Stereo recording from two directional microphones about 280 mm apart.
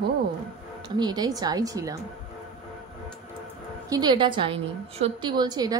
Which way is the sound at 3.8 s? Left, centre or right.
Centre.